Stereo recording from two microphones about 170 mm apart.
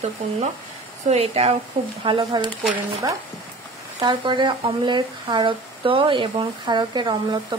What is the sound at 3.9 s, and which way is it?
Speech, 25° right (ahead or behind).